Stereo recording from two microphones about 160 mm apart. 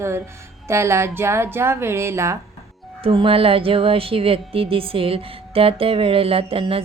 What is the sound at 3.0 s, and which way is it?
Speech, 35° right (ahead or behind).